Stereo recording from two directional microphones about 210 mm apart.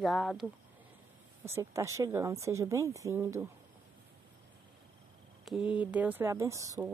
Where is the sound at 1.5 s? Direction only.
15° right (ahead or behind).